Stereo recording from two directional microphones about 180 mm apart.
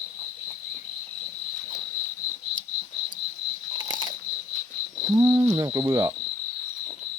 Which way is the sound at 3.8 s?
25° right (ahead or behind).